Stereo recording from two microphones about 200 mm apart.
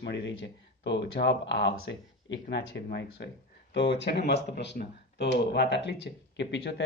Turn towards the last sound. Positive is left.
turn(degrees=60)  # may be behind; listen again after turning